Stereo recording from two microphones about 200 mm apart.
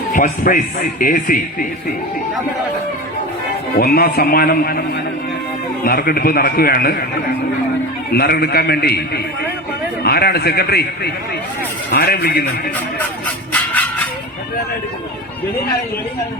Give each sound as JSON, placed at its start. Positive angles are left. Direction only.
{"t": 0.1, "sound": "a man's voice", "side_deg": 40}
{"t": 3.8, "sound": "a man's voice", "side_deg": 50}
{"t": 5.8, "sound": "a man's voice", "side_deg": 50}
{"t": 8.1, "sound": "a man's voice", "side_deg": 50}